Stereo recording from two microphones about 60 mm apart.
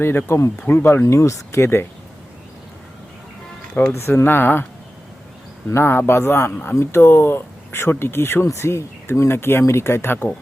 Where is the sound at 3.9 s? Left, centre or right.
Left.